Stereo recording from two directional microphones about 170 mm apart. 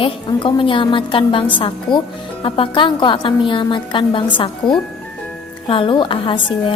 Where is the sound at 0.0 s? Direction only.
30° left (ahead or behind).